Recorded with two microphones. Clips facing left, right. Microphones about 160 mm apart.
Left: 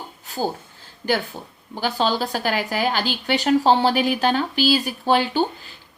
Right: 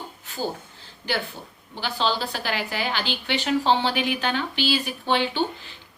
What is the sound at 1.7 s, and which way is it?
A woman's voice, 45° left (ahead or behind).